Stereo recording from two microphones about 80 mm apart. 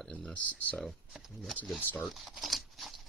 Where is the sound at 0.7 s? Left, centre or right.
Centre.